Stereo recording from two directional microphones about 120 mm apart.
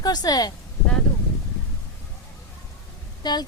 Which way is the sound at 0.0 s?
35° left (ahead or behind).